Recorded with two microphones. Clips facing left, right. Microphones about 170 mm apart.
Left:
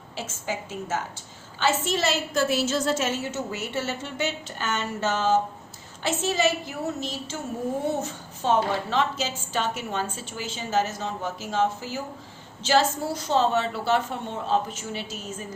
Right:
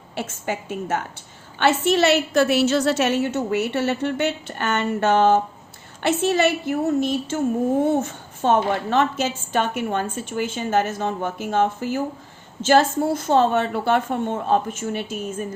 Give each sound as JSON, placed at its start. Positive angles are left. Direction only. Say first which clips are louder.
{"t": 0.2, "sound": "a woman's voice", "louder": "right 5 dB", "side_deg": -60}